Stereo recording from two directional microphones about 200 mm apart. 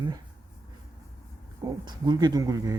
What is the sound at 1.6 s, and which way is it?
Speech, 20° right (ahead or behind).